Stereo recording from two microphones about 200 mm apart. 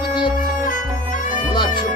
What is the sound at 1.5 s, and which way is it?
Music, 20° left (ahead or behind).